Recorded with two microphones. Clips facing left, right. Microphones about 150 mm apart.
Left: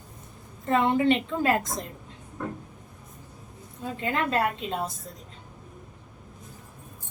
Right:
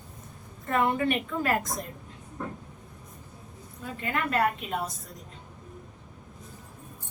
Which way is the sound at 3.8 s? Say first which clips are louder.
Left 3 dB; 25° left (ahead or behind).